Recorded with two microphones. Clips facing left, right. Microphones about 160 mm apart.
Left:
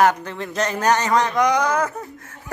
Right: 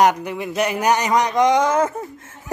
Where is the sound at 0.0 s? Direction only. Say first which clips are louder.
Right 1 dB; 15° right (ahead or behind).